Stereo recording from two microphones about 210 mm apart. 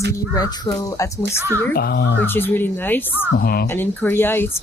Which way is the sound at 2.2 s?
10° left (ahead or behind).